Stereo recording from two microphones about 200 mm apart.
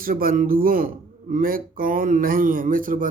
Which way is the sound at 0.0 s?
45° right (ahead or behind).